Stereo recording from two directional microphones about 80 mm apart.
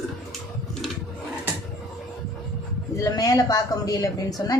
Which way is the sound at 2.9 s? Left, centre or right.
Left.